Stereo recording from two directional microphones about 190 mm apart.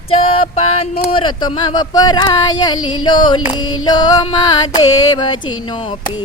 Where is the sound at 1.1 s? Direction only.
25° left (ahead or behind).